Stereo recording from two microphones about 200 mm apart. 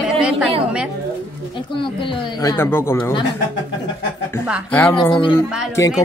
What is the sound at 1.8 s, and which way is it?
Speech, 25° left (ahead or behind).